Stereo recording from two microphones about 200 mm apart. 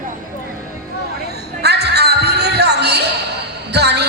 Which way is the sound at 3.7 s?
55° right (ahead or behind).